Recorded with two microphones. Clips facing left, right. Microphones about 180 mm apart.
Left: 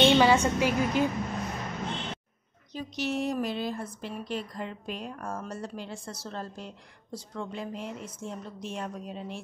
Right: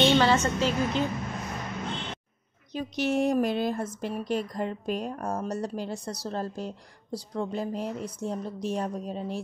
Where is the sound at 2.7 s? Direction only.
50° right (ahead or behind).